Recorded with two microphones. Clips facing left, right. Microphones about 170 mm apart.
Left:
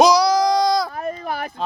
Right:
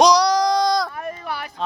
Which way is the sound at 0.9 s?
40° left (ahead or behind).